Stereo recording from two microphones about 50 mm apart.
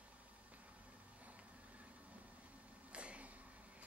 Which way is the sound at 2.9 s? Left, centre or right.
Right.